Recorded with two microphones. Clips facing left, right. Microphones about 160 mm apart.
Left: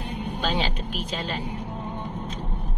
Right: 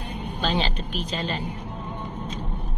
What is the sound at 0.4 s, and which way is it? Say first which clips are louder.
Speech: right 2 dB; 10° left (ahead or behind).